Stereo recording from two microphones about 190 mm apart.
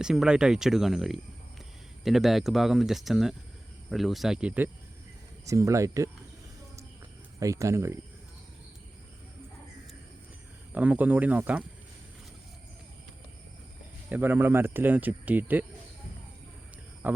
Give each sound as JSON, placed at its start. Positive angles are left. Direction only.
{"t": 0.0, "sound": "speech", "side_deg": -5}
{"t": 7.3, "sound": "speech", "side_deg": -15}
{"t": 10.7, "sound": "speech", "side_deg": -10}
{"t": 14.1, "sound": "speech", "side_deg": -10}
{"t": 17.0, "sound": "speech", "side_deg": -10}